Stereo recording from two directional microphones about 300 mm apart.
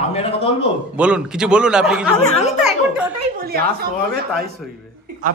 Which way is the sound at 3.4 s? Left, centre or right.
Right.